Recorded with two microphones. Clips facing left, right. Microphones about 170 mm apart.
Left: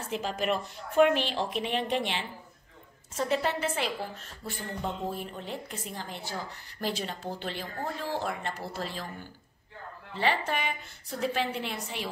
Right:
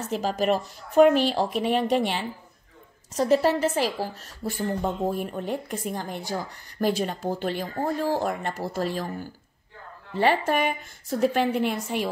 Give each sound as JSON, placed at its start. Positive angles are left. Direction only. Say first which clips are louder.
{"t": 0.0, "sound": "a woman's voice", "louder": "right 6 dB", "side_deg": -40}